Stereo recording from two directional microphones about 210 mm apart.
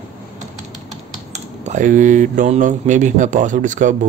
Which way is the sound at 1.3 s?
35° right (ahead or behind).